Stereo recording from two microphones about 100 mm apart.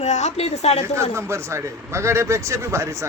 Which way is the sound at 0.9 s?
30° right (ahead or behind).